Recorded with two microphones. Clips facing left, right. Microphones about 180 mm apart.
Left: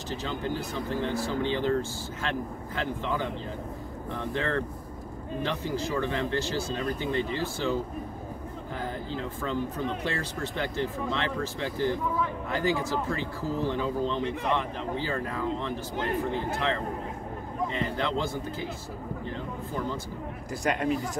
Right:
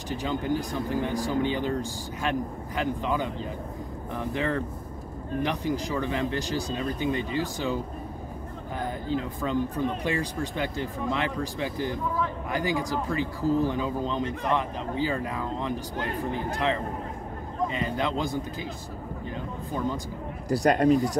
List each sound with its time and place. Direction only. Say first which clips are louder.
0.1 s speech: right 4 dB; 15° right (ahead or behind)
4.3 s speech: right 1 dB; 15° right (ahead or behind)
8.7 s a sound: right 5 dB; 15° right (ahead or behind)
10.0 s speech: right 3 dB; 15° right (ahead or behind)
17.7 s speech: even; 15° right (ahead or behind)
20.4 s speech: right 7 dB; 35° right (ahead or behind)